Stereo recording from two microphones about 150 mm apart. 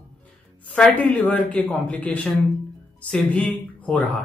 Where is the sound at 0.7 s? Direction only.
10° left (ahead or behind).